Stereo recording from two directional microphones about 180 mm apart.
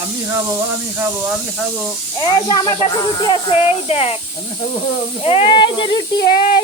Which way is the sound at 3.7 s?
35° left (ahead or behind).